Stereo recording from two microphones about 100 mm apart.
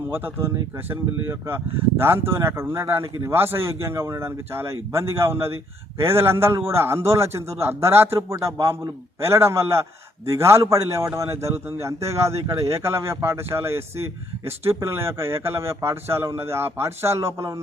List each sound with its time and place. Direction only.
0.1 s a man's voice: 25° right (ahead or behind)